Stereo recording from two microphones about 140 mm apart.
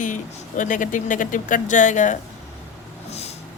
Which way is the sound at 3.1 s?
50° left (ahead or behind).